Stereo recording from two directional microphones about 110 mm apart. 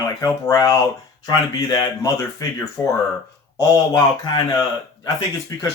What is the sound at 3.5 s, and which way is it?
Speech, 35° left (ahead or behind).